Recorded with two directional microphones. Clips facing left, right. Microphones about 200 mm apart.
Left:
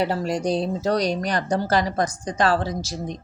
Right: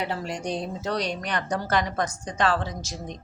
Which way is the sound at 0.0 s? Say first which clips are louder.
Left 7 dB; 35° left (ahead or behind).